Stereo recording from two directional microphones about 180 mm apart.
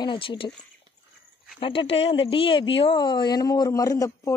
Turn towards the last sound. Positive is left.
turn(degrees=20)  # may be behind; listen again after turning